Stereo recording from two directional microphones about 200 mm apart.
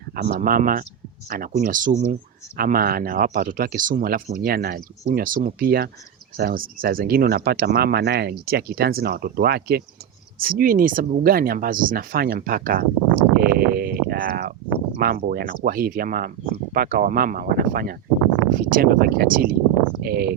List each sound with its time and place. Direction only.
0.2 s speech: 45° right (ahead or behind)